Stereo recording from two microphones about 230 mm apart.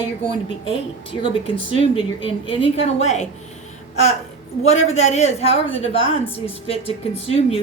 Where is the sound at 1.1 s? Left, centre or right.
Left.